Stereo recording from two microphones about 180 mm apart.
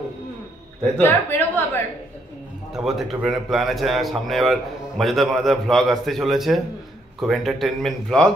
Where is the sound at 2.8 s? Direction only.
Centre (ahead or behind).